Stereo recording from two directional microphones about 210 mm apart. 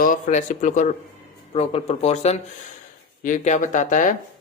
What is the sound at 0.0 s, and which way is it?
Speech, 40° left (ahead or behind).